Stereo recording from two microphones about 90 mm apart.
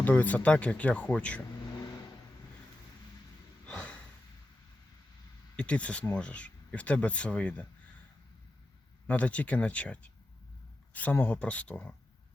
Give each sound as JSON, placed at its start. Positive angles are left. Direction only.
{"t": 0.0, "sound": "speech", "side_deg": 20}
{"t": 3.7, "sound": "a sound", "side_deg": 15}
{"t": 5.5, "sound": "speech", "side_deg": 15}
{"t": 9.0, "sound": "speech", "side_deg": 15}